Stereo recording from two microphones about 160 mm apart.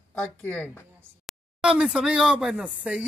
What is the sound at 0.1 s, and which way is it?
Speech, 10° left (ahead or behind).